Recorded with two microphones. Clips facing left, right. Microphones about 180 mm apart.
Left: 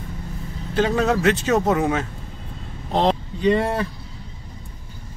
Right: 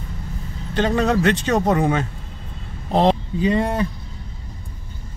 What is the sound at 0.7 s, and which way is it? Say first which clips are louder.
A man's voice: right 1 dB; 5° left (ahead or behind).